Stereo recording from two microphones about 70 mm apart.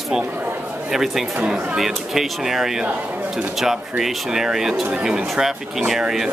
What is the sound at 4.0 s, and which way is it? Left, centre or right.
Speech, centre.